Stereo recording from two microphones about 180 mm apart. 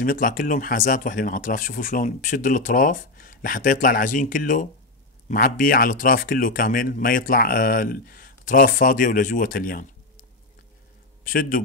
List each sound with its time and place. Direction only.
0.0 s speech: 50° left (ahead or behind)
11.2 s speech: 50° left (ahead or behind)